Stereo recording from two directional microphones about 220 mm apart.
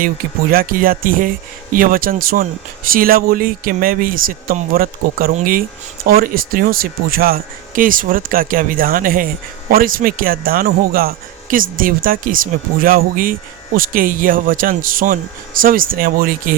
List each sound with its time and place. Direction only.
0.5 s speech: 40° right (ahead or behind)